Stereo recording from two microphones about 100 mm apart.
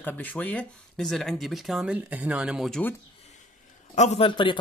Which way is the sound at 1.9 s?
15° right (ahead or behind).